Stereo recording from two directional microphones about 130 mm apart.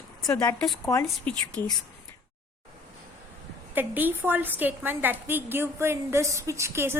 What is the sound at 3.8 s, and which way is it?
A woman's voice, 15° right (ahead or behind).